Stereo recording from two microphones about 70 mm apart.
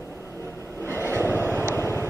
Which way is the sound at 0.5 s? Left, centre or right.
Left.